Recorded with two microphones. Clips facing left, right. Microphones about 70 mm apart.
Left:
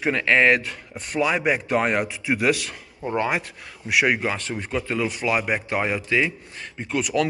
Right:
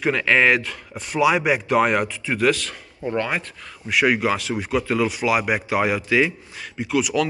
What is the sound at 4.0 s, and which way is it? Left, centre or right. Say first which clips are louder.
Speech: right 3 dB; centre.